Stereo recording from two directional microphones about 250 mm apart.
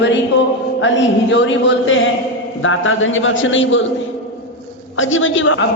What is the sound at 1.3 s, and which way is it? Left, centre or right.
A man's voice, left.